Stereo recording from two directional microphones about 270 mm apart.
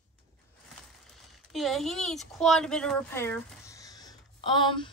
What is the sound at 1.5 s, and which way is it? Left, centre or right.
Speech, centre.